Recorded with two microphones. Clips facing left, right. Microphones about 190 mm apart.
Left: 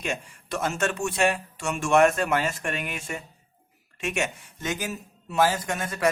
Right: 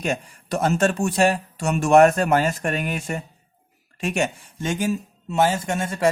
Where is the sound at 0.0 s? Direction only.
40° right (ahead or behind).